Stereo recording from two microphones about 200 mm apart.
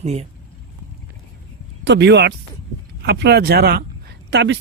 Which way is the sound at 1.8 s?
60° right (ahead or behind).